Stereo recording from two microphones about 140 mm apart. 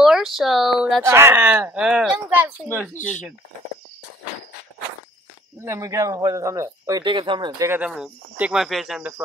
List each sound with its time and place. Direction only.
0.0 s speech: centre (ahead or behind)
1.0 s speech: 15° right (ahead or behind)
5.7 s speech: 20° right (ahead or behind)
7.6 s speech: 15° right (ahead or behind)
7.9 s speech: 5° right (ahead or behind)